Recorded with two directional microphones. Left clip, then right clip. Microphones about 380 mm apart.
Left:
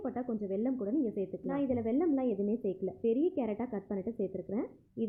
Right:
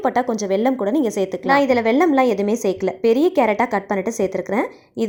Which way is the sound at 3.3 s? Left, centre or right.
Centre.